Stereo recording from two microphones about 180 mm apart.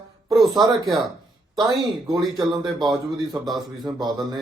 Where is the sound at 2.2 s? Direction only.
25° right (ahead or behind).